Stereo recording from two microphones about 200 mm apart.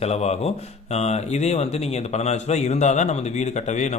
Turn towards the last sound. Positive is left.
turn(degrees=35)  # may be behind; listen again after turning